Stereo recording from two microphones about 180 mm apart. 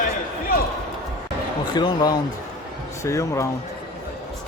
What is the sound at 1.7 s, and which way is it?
Speech, 20° left (ahead or behind).